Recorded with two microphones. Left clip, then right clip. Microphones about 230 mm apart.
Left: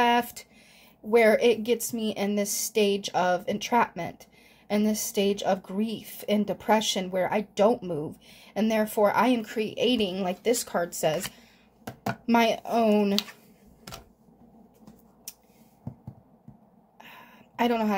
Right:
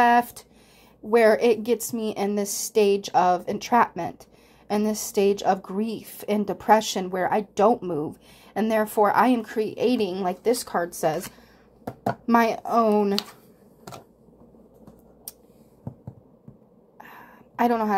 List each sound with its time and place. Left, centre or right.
0.0 s a woman's voice: centre
12.3 s speech: centre
17.0 s a sound: centre